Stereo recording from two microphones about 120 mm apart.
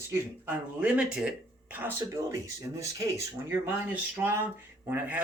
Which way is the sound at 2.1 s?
25° right (ahead or behind).